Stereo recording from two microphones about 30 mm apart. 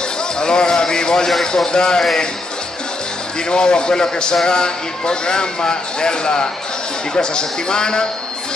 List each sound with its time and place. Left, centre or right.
0.4 s a sound: left
1.7 s speech: left
3.3 s speech: left